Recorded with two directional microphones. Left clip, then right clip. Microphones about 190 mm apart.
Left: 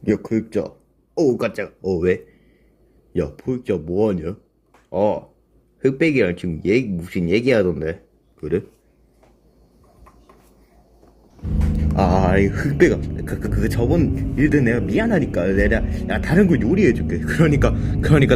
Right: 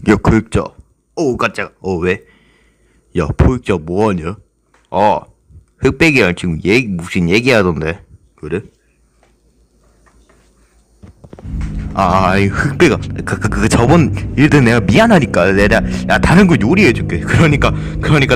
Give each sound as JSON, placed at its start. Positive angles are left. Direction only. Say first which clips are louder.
{"t": 0.0, "sound": "speech", "louder": "right 9 dB", "side_deg": -30}
{"t": 12.3, "sound": "speech", "louder": "right 5 dB", "side_deg": -20}